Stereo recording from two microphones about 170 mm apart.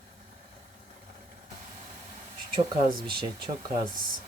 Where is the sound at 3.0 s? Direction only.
30° right (ahead or behind).